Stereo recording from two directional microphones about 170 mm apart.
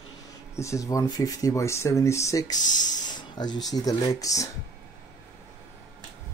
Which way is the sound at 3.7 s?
20° left (ahead or behind).